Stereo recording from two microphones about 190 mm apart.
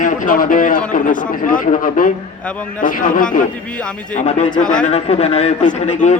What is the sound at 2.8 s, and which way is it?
Speech, 45° left (ahead or behind).